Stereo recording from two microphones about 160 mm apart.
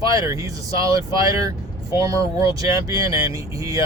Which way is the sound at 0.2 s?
20° right (ahead or behind).